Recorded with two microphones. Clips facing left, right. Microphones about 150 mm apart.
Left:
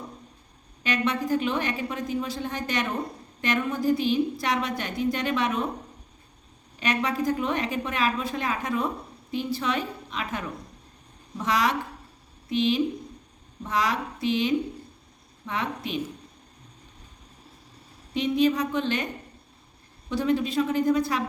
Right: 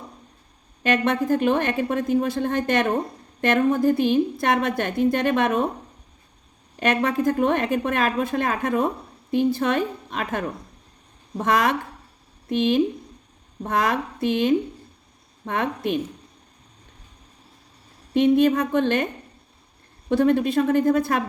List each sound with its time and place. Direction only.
0.8 s speech: 50° right (ahead or behind)
6.7 s speech: 55° right (ahead or behind)
18.1 s speech: 55° right (ahead or behind)
20.1 s speech: 55° right (ahead or behind)